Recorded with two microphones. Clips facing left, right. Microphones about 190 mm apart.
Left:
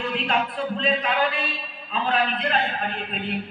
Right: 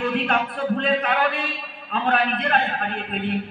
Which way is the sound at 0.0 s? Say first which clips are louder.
Right 2 dB; 60° right (ahead or behind).